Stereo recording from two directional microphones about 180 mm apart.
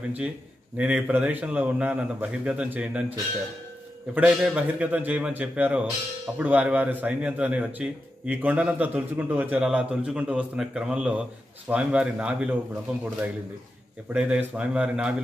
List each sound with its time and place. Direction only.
0.7 s a man's voice: 5° right (ahead or behind)
4.1 s a man's voice: 5° right (ahead or behind)
14.0 s speech: 5° right (ahead or behind)